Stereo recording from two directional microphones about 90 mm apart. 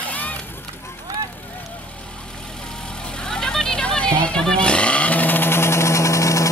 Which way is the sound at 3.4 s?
5° left (ahead or behind).